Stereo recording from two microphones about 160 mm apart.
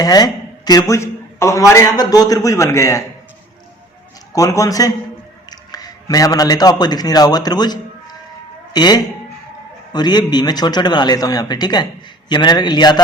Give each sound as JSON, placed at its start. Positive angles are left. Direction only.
{"t": 0.0, "sound": "a man's voice", "side_deg": 25}
{"t": 4.3, "sound": "a man's voice", "side_deg": 20}